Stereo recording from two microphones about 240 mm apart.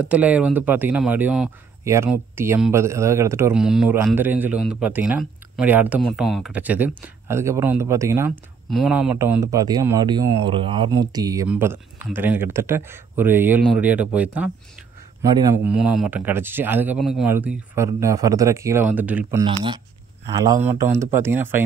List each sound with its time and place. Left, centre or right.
0.0 s speech: centre
19.4 s speech: right